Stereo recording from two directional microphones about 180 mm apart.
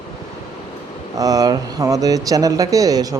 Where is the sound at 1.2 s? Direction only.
20° right (ahead or behind).